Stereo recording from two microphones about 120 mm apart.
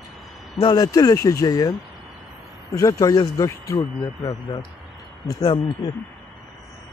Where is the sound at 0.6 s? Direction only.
35° left (ahead or behind).